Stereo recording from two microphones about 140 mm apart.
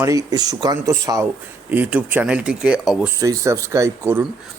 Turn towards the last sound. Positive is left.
turn(degrees=-20)  # may be behind; listen again after turning